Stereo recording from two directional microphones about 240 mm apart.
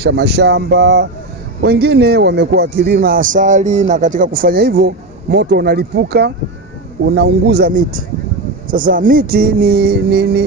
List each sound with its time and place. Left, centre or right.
0.0 s a man's voice: right